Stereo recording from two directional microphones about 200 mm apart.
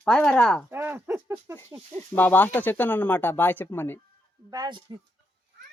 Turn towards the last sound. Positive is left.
turn(degrees=-20)  # may be behind; listen again after turning